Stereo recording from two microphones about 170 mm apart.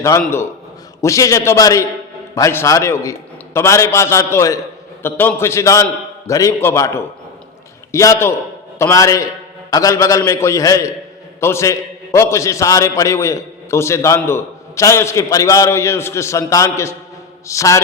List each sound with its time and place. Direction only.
1.0 s a man's voice: 20° left (ahead or behind)